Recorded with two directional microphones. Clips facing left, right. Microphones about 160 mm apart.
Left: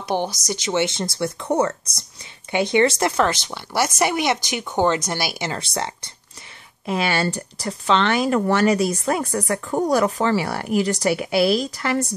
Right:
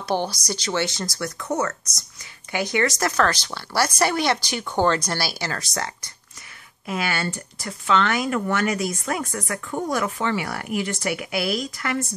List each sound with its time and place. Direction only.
0.1 s speech: 20° left (ahead or behind)